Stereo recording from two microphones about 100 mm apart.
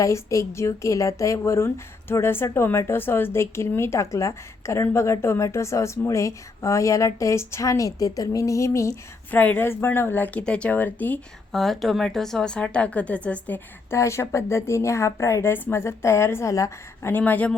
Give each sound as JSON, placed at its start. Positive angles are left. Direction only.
{"t": 0.0, "sound": "a woman's voice", "side_deg": 30}
{"t": 9.3, "sound": "speech", "side_deg": 15}
{"t": 11.5, "sound": "speech", "side_deg": 5}
{"t": 13.9, "sound": "speech", "side_deg": 30}